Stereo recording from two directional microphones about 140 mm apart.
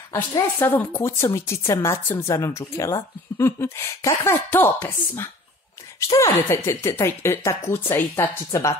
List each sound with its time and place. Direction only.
0.1 s speech: 20° left (ahead or behind)